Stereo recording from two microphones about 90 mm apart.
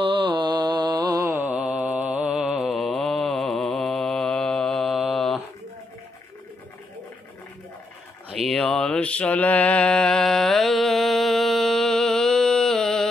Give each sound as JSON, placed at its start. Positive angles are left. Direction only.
{"t": 0.0, "sound": "mantra", "side_deg": -75}
{"t": 1.4, "sound": "mantra", "side_deg": -10}
{"t": 8.4, "sound": "mantra", "side_deg": 5}